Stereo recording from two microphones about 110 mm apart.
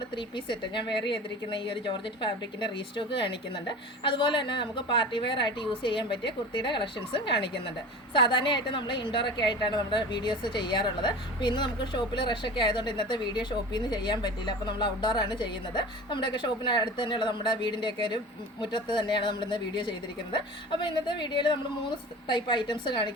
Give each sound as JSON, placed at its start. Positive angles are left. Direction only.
{"t": 0.2, "sound": "a woman's voice", "side_deg": 45}